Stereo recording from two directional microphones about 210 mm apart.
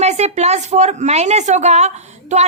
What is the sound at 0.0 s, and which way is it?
Speech, 30° right (ahead or behind).